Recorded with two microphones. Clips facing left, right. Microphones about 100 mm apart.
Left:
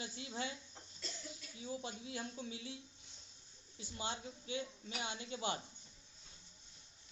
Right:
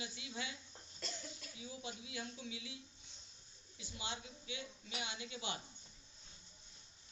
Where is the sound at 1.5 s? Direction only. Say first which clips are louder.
Left 5 dB; 45° left (ahead or behind).